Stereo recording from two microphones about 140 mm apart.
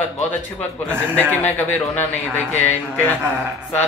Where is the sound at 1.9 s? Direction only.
15° left (ahead or behind).